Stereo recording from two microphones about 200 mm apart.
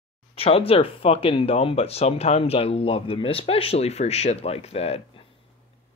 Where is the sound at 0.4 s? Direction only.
30° left (ahead or behind).